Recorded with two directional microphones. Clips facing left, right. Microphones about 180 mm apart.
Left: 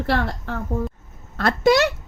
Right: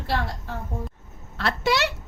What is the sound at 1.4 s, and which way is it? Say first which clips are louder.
Speech: left 7 dB; 45° left (ahead or behind).